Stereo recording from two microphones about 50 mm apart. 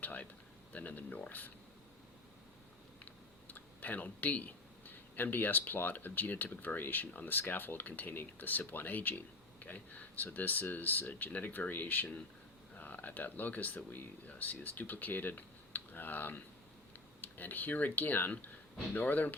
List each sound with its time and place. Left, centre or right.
0.0 s speech: left
3.0 s speech: left